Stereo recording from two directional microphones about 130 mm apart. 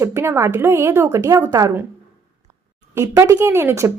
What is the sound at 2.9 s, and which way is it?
Speech, 20° right (ahead or behind).